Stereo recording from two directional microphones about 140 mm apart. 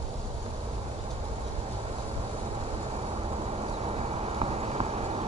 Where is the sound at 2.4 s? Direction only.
45° right (ahead or behind).